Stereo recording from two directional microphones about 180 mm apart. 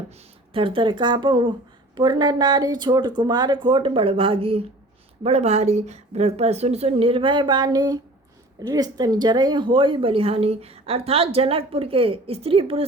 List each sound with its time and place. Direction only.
0.5 s speech: 30° right (ahead or behind)